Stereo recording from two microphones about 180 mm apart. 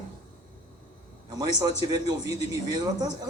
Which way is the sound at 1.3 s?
20° right (ahead or behind).